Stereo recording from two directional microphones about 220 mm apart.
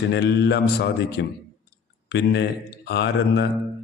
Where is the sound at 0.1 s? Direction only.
50° left (ahead or behind).